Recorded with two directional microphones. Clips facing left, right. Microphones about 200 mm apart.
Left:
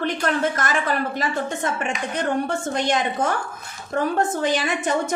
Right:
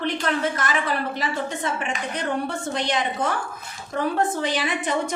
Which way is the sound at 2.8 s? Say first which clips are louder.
Left 3 dB; 45° left (ahead or behind).